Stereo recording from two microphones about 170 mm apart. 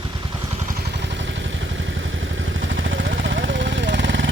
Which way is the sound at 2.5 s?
90° right.